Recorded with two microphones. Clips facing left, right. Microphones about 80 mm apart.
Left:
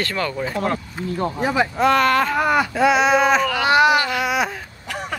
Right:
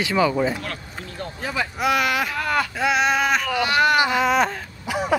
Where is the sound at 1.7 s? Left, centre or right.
Centre.